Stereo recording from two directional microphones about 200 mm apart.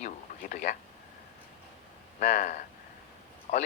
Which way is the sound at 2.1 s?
40° left (ahead or behind).